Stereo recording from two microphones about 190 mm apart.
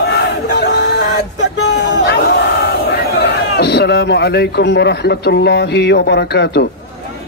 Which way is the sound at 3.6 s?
60° left (ahead or behind).